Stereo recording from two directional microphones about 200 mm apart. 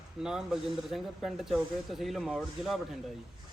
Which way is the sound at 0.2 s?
5° right (ahead or behind).